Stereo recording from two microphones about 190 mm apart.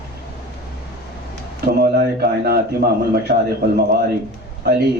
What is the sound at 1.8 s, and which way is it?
A man's voice, 55° right (ahead or behind).